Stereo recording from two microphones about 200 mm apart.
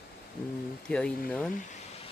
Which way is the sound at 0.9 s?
5° left (ahead or behind).